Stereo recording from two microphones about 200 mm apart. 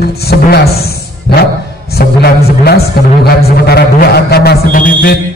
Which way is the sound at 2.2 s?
50° left (ahead or behind).